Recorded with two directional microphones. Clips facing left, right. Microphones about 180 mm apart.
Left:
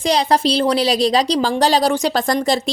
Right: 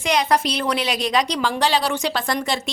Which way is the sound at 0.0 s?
35° left (ahead or behind).